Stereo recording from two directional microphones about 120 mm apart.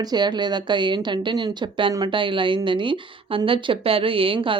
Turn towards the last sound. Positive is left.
turn(degrees=-45)  # may be behind; listen again after turning